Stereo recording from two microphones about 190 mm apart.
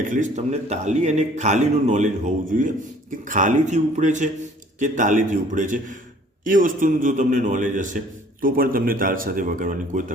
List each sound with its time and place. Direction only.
0.0 s a man's voice: 40° right (ahead or behind)